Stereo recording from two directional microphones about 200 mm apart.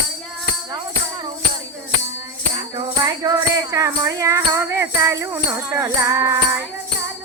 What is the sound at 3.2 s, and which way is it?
Music, 20° right (ahead or behind).